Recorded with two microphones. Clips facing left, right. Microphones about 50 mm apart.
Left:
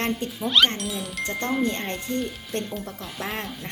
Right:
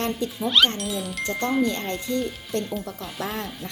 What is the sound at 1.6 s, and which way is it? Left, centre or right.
Speech, left.